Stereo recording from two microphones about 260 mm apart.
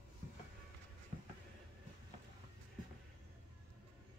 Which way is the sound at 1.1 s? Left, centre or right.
Right.